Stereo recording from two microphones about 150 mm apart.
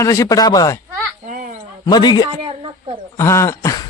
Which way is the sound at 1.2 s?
55° right (ahead or behind).